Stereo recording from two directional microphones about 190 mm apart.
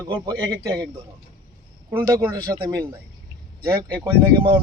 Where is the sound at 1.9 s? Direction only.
15° right (ahead or behind).